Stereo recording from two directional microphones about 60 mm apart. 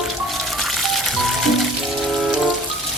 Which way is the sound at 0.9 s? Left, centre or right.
Centre.